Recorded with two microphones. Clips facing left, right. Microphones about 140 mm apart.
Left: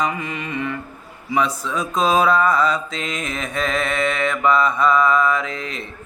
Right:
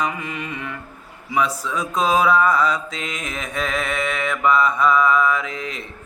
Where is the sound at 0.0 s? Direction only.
10° right (ahead or behind).